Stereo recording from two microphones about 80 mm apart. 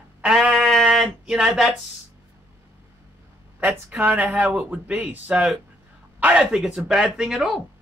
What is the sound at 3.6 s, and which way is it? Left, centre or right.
Speech, centre.